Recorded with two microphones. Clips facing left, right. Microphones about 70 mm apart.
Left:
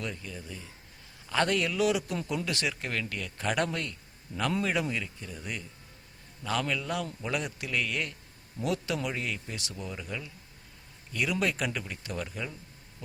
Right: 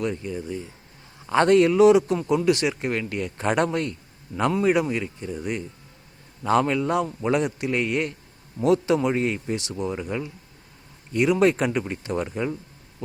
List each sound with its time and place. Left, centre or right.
0.0 s speech: right
1.3 s speech: right
4.3 s a man's voice: centre
4.6 s speech: centre